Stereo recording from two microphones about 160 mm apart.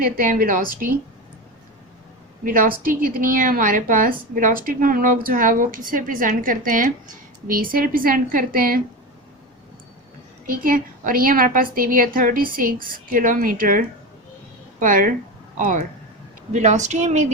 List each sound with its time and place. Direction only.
0.0 s a woman's voice: 60° right (ahead or behind)
2.4 s a woman's voice: 60° right (ahead or behind)
10.4 s a woman's voice: 60° right (ahead or behind)